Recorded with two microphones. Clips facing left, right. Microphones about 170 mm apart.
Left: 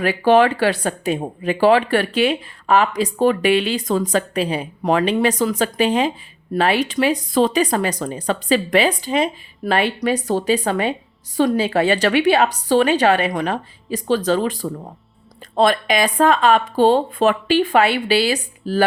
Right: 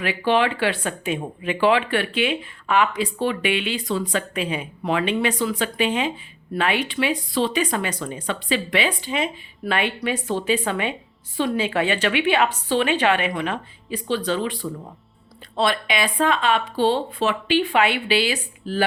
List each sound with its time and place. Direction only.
0.0 s speech: 40° left (ahead or behind)